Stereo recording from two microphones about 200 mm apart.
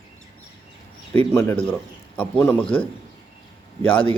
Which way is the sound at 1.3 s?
10° left (ahead or behind).